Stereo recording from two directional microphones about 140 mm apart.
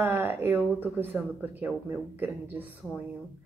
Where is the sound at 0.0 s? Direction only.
15° right (ahead or behind).